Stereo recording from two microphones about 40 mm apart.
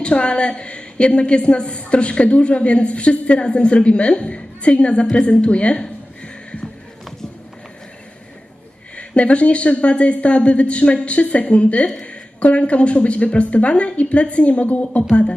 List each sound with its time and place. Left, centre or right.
0.0 s a woman's voice: left
5.1 s music: left
9.0 s speech: left